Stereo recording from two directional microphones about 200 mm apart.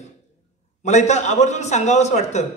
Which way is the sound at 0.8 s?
35° left (ahead or behind).